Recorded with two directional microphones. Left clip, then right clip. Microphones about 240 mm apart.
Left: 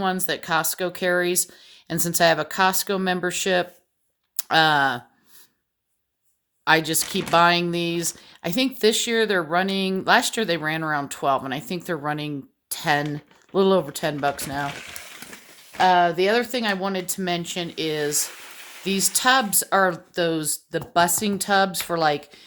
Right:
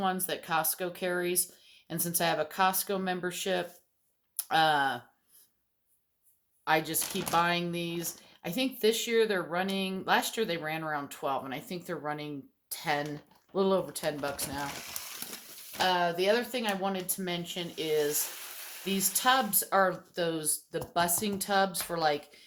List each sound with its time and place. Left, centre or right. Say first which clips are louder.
0.0 s speech: left 7 dB; left
6.7 s speech: left 9 dB; left
15.8 s speech: left 10 dB; left